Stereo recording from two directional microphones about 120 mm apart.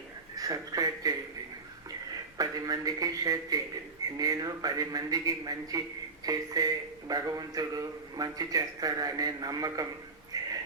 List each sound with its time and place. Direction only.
0.3 s speech: 30° right (ahead or behind)
2.4 s a man's voice: 30° right (ahead or behind)
10.3 s a sound: 30° right (ahead or behind)